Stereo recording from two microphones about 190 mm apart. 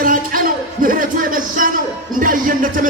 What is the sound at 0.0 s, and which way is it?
Music, 45° right (ahead or behind).